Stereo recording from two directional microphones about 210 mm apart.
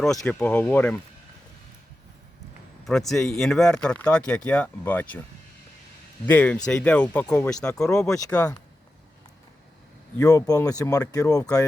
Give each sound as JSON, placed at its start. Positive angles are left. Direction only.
{"t": 0.3, "sound": "speech", "side_deg": 5}
{"t": 2.8, "sound": "speech", "side_deg": 0}
{"t": 6.2, "sound": "speech", "side_deg": 5}
{"t": 10.2, "sound": "speech", "side_deg": 15}